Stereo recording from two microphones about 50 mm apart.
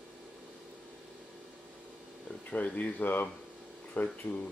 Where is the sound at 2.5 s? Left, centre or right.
Left.